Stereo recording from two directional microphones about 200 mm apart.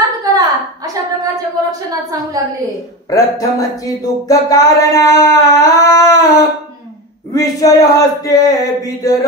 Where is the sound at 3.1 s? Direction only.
15° left (ahead or behind).